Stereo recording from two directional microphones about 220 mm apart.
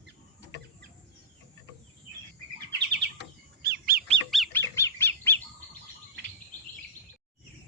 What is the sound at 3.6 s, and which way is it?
Bird, 45° right (ahead or behind).